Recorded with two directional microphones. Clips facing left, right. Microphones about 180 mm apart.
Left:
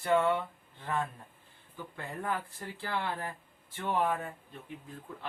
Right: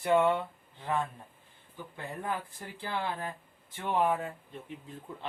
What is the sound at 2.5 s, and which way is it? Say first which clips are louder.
Speech: even; 15° right (ahead or behind).